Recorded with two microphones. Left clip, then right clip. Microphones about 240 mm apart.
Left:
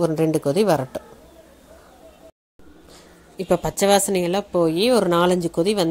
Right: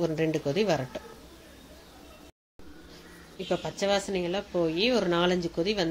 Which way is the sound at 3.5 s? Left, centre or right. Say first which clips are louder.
Left 10 dB; left.